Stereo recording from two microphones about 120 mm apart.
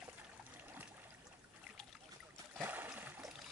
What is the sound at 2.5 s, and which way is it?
Splash, 15° right (ahead or behind).